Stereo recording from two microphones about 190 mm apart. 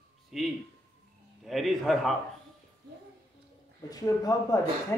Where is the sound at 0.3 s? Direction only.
5° right (ahead or behind).